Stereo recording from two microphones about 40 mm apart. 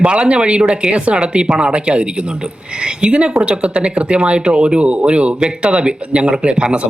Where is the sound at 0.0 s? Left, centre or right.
Right.